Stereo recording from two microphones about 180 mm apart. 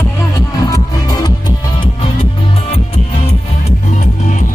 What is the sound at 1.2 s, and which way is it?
Music, 25° left (ahead or behind).